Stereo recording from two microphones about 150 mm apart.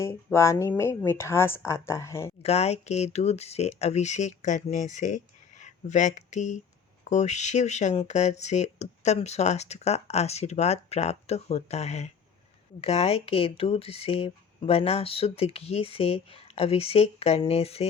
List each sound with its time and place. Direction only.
0.0 s speech: 20° left (ahead or behind)
2.4 s speech: 45° left (ahead or behind)